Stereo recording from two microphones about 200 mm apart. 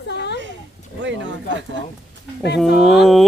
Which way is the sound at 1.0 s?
65° right (ahead or behind).